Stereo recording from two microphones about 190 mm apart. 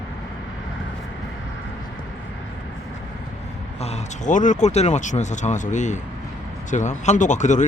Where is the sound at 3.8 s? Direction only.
35° left (ahead or behind).